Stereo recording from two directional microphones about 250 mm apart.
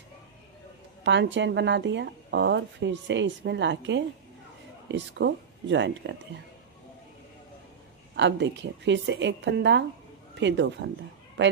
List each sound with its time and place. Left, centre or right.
1.0 s a woman's voice: right
8.1 s a woman's voice: right